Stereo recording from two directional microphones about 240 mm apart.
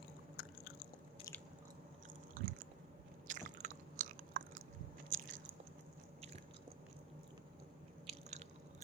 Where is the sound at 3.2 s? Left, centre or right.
Right.